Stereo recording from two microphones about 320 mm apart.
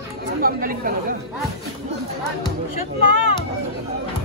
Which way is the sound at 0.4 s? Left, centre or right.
Right.